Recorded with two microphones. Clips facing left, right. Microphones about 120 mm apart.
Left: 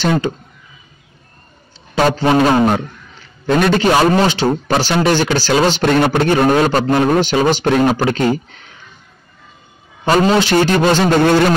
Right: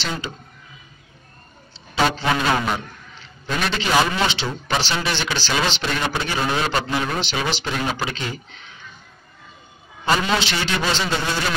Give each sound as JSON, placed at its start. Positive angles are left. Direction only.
{"t": 0.0, "sound": "a man's voice", "side_deg": 50}
{"t": 2.0, "sound": "a man's voice", "side_deg": 45}
{"t": 10.0, "sound": "a man's voice", "side_deg": 45}